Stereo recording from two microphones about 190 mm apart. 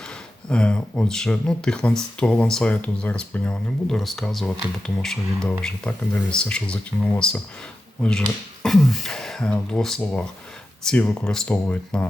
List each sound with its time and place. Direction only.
0.4 s speech: 5° left (ahead or behind)
8.6 s speech: centre (ahead or behind)